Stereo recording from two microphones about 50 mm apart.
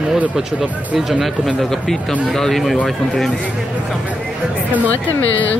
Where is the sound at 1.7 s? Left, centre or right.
Centre.